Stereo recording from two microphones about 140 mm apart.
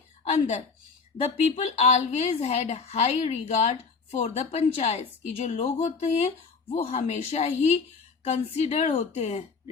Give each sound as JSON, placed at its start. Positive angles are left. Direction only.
{"t": 0.3, "sound": "a woman's voice", "side_deg": 50}